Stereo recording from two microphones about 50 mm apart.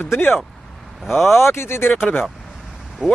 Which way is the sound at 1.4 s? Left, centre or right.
Left.